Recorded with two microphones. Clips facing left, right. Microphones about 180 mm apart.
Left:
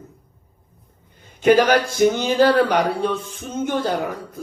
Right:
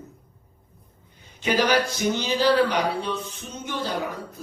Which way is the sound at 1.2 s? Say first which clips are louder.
Left 9 dB; 50° left (ahead or behind).